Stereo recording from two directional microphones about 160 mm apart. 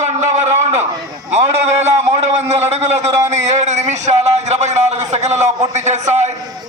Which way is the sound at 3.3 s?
45° right (ahead or behind).